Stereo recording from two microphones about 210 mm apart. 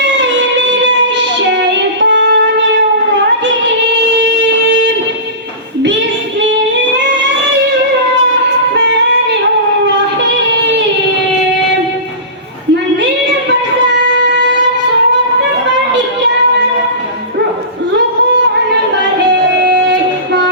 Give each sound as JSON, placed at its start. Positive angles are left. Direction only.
{"t": 1.5, "sound": "music", "side_deg": -60}
{"t": 4.2, "sound": "a sound", "side_deg": -55}
{"t": 6.9, "sound": "music", "side_deg": -60}
{"t": 19.6, "sound": "music", "side_deg": -55}